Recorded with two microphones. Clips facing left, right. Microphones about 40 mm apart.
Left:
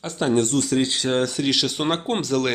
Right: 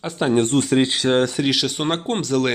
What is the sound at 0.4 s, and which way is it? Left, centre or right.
Speech, right.